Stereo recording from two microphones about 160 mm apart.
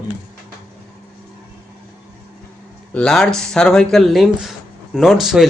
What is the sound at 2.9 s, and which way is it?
Speech, 5° left (ahead or behind).